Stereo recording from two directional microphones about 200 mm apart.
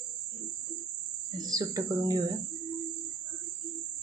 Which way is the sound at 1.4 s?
20° right (ahead or behind).